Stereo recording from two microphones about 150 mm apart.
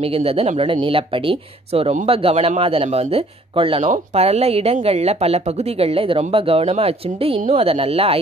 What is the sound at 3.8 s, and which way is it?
Speech, 50° right (ahead or behind).